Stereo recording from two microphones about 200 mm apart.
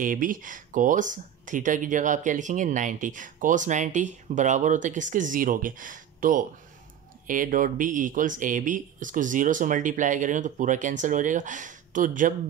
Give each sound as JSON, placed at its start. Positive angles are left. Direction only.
{"t": 0.0, "sound": "speech", "side_deg": -45}